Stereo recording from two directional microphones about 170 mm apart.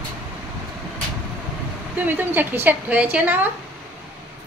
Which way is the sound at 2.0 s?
10° right (ahead or behind).